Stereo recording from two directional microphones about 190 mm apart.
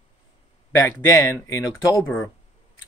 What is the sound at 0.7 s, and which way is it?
Speech, 15° left (ahead or behind).